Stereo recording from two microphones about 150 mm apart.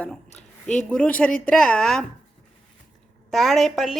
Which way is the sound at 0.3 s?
50° left (ahead or behind).